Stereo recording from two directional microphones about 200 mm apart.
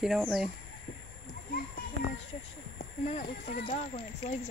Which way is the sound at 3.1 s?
40° left (ahead or behind).